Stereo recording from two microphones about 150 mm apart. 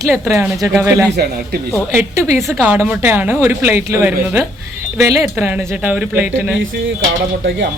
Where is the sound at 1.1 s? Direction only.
90° right.